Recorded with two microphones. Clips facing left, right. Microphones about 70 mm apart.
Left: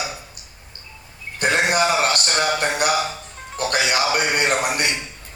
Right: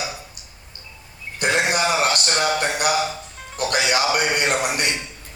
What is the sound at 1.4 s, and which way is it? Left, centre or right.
Music, left.